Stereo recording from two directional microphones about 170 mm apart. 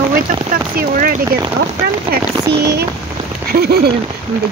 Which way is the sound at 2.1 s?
75° right (ahead or behind).